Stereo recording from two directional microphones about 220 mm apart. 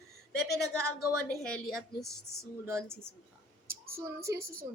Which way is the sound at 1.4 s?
5° left (ahead or behind).